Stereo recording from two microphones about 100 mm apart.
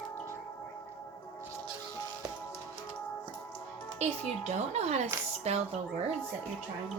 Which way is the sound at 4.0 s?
90° right.